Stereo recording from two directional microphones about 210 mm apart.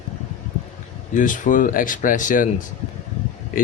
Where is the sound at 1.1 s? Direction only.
40° left (ahead or behind).